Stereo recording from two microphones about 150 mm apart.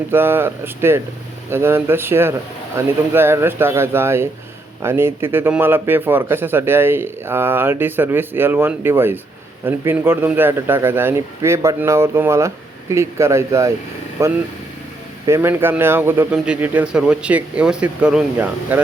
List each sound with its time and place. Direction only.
0.1 s a man's voice: 15° right (ahead or behind)